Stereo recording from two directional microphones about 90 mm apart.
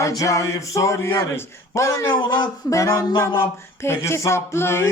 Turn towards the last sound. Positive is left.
turn(degrees=30)  # may be behind; listen again after turning